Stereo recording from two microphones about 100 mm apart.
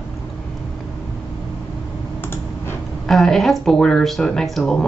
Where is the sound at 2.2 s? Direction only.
20° left (ahead or behind).